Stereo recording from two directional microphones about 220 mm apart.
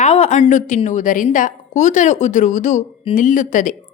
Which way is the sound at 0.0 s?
30° left (ahead or behind).